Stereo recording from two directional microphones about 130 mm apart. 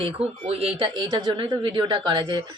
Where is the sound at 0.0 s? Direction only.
50° right (ahead or behind).